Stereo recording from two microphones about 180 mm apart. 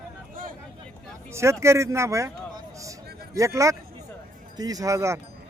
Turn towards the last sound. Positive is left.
turn(degrees=-15)  # may be behind; listen again after turning